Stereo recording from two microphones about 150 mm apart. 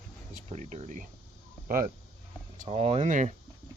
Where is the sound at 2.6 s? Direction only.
45° right (ahead or behind).